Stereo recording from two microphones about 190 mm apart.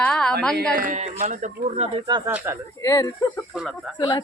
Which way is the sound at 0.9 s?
35° right (ahead or behind).